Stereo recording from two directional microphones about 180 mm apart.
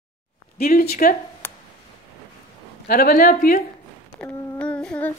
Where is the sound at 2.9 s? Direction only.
55° left (ahead or behind).